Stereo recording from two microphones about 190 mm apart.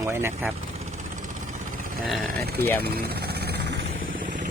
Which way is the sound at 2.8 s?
55° right (ahead or behind).